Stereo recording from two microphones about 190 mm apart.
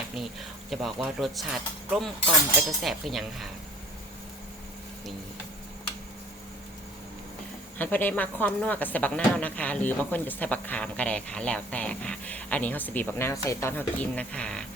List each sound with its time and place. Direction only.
0.7 s speech: centre (ahead or behind)
7.8 s speech: 10° left (ahead or behind)